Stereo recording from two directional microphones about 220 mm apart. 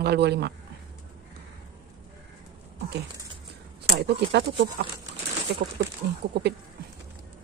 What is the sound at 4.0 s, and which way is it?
Speech, 50° right (ahead or behind).